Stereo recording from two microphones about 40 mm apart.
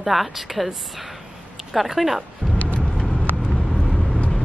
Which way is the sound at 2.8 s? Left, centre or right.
Left.